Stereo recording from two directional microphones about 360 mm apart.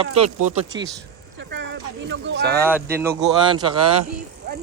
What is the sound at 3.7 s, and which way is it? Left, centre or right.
Speech, right.